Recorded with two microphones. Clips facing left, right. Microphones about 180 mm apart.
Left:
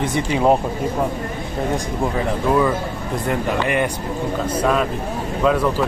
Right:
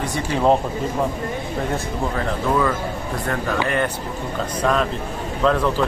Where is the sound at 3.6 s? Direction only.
15° left (ahead or behind).